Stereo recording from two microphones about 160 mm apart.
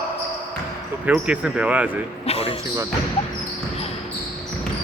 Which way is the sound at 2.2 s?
40° left (ahead or behind).